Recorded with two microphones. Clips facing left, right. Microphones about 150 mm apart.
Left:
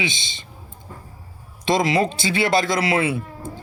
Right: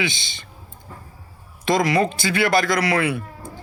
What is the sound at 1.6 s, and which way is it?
A man's voice, 25° left (ahead or behind).